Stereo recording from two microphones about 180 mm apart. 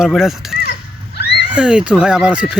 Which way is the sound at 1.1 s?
65° left (ahead or behind).